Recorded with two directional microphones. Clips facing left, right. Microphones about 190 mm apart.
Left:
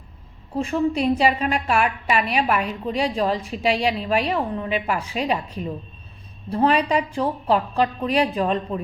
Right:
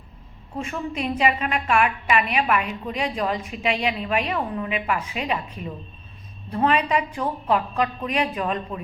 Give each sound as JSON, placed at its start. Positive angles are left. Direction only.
{"t": 0.5, "sound": "a woman's voice", "side_deg": 35}